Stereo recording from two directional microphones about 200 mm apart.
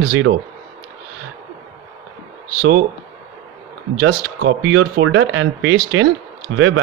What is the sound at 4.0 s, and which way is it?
Speech, 75° right (ahead or behind).